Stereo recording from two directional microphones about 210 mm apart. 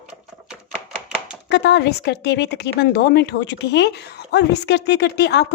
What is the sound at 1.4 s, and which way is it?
Speech, 55° left (ahead or behind).